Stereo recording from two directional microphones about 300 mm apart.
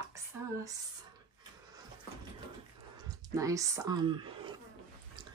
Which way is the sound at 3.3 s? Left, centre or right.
Centre.